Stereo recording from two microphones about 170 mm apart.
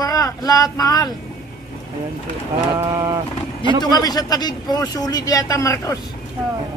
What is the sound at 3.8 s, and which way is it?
Speech, 25° left (ahead or behind).